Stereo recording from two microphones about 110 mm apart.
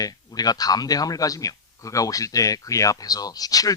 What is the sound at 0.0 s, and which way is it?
Speech, 35° left (ahead or behind).